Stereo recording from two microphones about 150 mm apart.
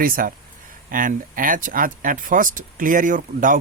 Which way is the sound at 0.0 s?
70° right (ahead or behind).